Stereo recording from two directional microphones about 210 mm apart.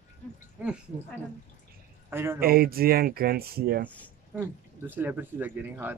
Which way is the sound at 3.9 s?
5° left (ahead or behind).